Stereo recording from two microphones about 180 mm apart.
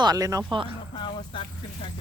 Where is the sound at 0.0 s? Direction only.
20° right (ahead or behind).